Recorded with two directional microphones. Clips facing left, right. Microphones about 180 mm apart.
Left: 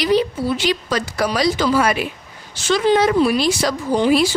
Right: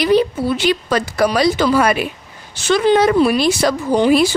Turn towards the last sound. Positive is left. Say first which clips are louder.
# right 3 dB
turn(degrees=-60)  # may be behind; listen again after turning